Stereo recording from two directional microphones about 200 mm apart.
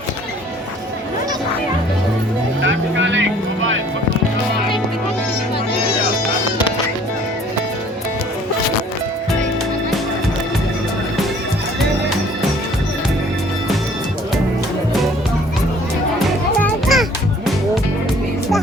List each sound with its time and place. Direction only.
2.6 s speech: 70° right (ahead or behind)
16.1 s music: 5° left (ahead or behind)